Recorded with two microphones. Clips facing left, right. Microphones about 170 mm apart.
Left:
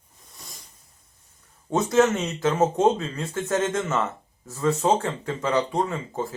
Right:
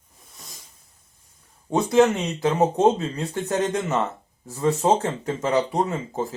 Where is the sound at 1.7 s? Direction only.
15° right (ahead or behind).